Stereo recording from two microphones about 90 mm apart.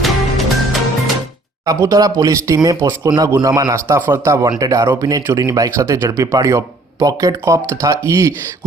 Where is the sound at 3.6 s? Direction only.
30° right (ahead or behind).